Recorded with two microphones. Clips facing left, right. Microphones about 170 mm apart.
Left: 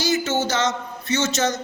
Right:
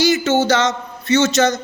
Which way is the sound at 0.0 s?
70° right (ahead or behind).